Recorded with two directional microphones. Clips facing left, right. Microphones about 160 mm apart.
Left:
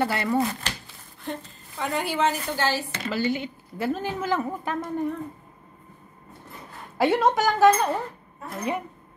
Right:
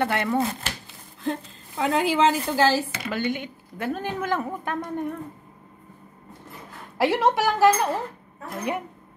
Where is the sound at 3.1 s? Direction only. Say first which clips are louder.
Left 2 dB; 55° right (ahead or behind).